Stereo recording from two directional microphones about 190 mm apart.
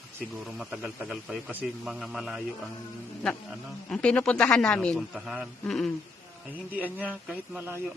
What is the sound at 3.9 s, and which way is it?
A man's voice, 5° left (ahead or behind).